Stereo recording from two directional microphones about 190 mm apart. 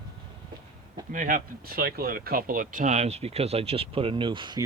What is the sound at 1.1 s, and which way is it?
Speech, 45° right (ahead or behind).